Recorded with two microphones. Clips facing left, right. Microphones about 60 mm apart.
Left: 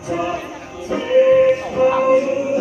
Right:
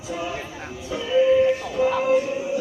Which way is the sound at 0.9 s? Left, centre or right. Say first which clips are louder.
Left 6 dB; left.